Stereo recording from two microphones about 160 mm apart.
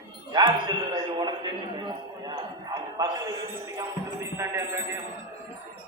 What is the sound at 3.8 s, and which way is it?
Music, 15° right (ahead or behind).